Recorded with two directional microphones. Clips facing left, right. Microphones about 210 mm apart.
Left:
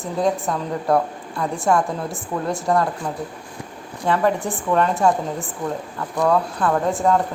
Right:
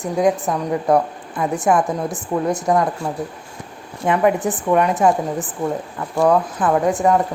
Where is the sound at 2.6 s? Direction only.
20° right (ahead or behind).